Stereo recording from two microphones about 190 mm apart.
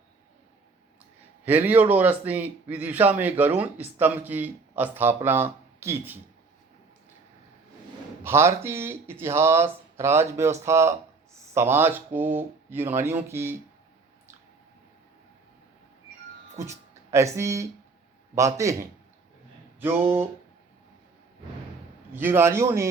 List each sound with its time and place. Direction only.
1.5 s a man's voice: 10° right (ahead or behind)
8.2 s a man's voice: 15° right (ahead or behind)
17.1 s a man's voice: 15° right (ahead or behind)
22.1 s a man's voice: 10° right (ahead or behind)